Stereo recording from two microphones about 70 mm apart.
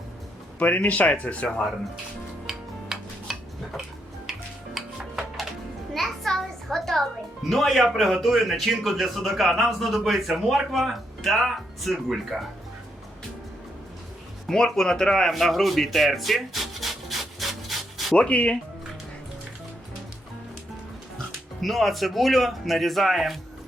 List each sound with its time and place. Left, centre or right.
0.6 s speech: left
2.5 s music: centre
7.5 s a man's voice: centre
14.4 s a sound: centre
18.1 s speech: centre
21.6 s a man's voice: centre